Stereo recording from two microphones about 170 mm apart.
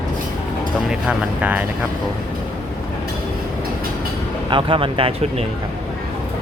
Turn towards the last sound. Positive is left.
turn(degrees=-30)  # may be behind; listen again after turning